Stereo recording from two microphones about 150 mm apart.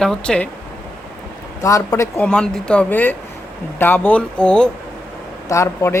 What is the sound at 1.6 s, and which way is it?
Speech, 20° left (ahead or behind).